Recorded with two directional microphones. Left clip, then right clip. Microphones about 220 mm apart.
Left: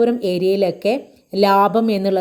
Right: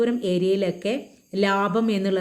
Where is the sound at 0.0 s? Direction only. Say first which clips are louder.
Left 6 dB; 20° left (ahead or behind).